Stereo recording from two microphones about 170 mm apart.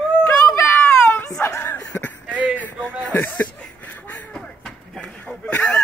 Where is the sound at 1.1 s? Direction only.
15° left (ahead or behind).